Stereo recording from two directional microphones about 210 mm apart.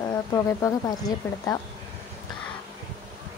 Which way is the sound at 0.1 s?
15° left (ahead or behind).